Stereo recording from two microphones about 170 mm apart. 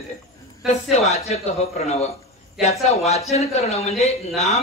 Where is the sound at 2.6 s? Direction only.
40° left (ahead or behind).